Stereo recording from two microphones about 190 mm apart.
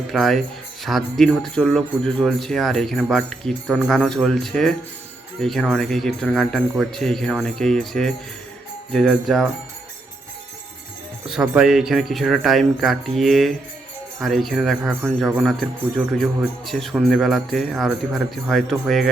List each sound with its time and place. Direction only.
0.1 s speech: centre (ahead or behind)
11.3 s speech: 5° right (ahead or behind)